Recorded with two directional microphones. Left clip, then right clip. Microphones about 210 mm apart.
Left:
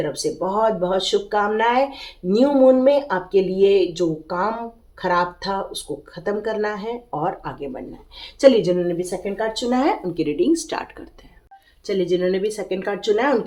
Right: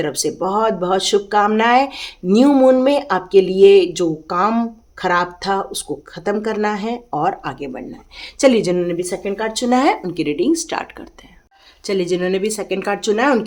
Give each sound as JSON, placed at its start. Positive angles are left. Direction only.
{"t": 0.0, "sound": "speech", "side_deg": -50}
{"t": 11.9, "sound": "speech", "side_deg": -35}